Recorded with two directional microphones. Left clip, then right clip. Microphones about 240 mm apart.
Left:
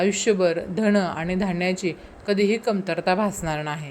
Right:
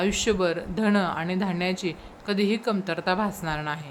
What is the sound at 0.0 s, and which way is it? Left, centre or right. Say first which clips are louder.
Speech: left 4 dB; centre.